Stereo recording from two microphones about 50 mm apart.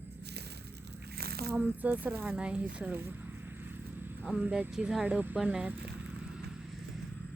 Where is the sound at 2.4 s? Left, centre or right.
Right.